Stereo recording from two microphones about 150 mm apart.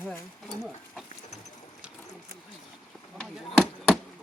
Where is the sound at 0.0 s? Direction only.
15° left (ahead or behind).